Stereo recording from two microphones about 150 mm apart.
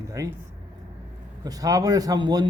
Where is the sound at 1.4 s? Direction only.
25° right (ahead or behind).